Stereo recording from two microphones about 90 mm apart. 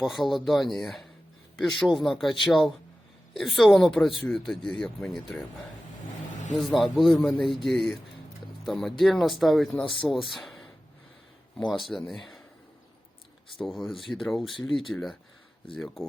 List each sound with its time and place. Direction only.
0.0 s a man's voice: centre (ahead or behind)
6.6 s a man's voice: centre (ahead or behind)
9.8 s speech: 70° left (ahead or behind)
10.1 s speech: centre (ahead or behind)
11.7 s a man's voice: centre (ahead or behind)
13.7 s a man's voice: centre (ahead or behind)
15.7 s a man's voice: 5° left (ahead or behind)